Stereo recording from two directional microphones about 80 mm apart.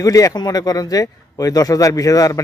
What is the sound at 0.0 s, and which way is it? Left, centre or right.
A man's voice, left.